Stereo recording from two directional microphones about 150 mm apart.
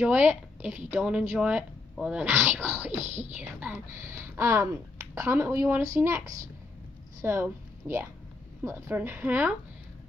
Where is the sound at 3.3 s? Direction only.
10° right (ahead or behind).